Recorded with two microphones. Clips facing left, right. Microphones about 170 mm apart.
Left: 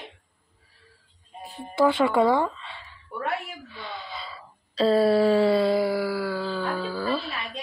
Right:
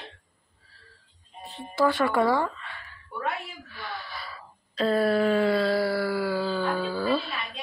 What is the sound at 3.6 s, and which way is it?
Gasp, 25° left (ahead or behind).